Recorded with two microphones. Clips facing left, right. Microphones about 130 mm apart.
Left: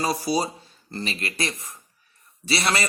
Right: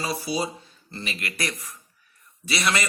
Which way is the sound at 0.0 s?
40° left (ahead or behind).